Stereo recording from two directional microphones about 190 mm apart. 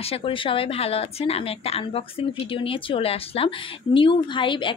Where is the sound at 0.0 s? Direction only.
30° left (ahead or behind).